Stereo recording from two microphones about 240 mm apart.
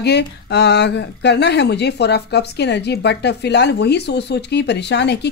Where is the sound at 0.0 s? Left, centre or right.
Left.